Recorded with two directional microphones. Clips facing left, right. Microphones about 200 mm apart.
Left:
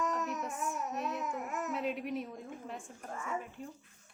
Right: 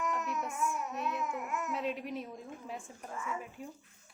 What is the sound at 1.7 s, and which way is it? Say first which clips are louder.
A woman's voice: left 2 dB; centre (ahead or behind).